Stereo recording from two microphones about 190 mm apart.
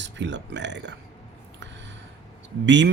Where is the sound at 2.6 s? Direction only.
70° right (ahead or behind).